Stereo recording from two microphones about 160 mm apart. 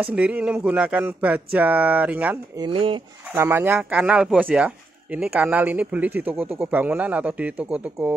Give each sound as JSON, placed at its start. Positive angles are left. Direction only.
{"t": 0.0, "sound": "speech", "side_deg": -10}
{"t": 2.5, "sound": "speech", "side_deg": -30}
{"t": 3.3, "sound": "speech", "side_deg": -15}